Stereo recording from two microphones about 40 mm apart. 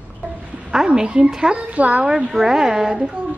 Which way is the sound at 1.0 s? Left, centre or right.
Right.